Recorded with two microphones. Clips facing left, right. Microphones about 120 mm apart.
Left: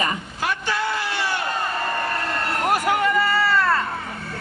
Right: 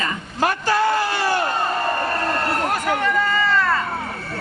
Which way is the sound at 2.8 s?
10° left (ahead or behind).